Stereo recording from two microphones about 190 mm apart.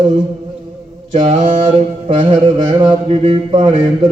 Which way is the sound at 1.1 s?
30° right (ahead or behind).